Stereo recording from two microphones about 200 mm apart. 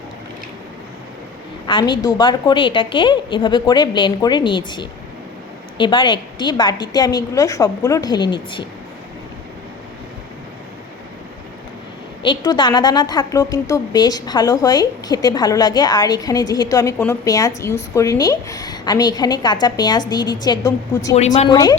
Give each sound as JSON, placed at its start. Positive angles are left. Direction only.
{"t": 1.6, "sound": "a woman's voice", "side_deg": 25}
{"t": 12.2, "sound": "a woman's voice", "side_deg": 25}
{"t": 21.2, "sound": "speech", "side_deg": 35}
{"t": 21.5, "sound": "a woman's voice", "side_deg": 20}